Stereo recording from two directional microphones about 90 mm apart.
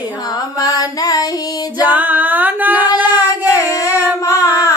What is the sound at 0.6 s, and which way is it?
Mantra, 40° left (ahead or behind).